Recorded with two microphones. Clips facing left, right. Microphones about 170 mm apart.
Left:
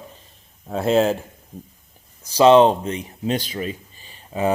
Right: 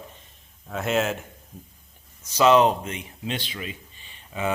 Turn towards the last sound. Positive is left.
turn(degrees=35)  # may be behind; listen again after turning